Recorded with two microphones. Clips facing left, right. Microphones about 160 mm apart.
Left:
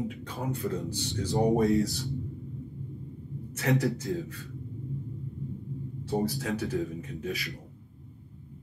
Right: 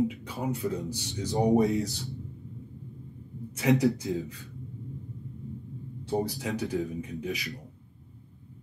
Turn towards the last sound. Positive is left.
turn(degrees=-15)  # may be behind; listen again after turning